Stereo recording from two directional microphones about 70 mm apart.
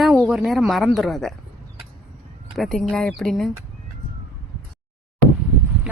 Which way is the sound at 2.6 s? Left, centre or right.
Centre.